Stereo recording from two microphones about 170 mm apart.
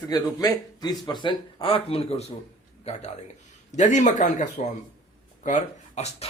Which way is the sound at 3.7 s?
45° left (ahead or behind).